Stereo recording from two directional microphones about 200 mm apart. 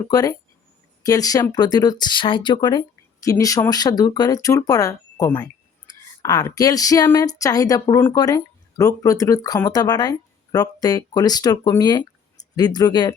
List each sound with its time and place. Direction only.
0.1 s speech: 20° left (ahead or behind)